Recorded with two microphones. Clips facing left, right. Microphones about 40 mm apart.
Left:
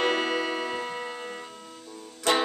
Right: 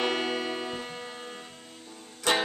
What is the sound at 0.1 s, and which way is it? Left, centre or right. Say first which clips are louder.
Music: left 3 dB; left.